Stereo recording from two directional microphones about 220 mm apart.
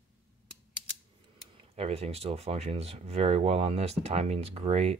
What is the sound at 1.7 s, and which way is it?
Speech, 30° right (ahead or behind).